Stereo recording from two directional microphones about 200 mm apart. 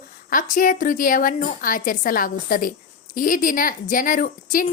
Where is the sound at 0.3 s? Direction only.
45° left (ahead or behind).